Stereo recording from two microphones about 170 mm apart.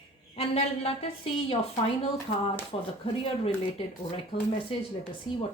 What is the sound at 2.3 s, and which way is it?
Speech, 60° left (ahead or behind).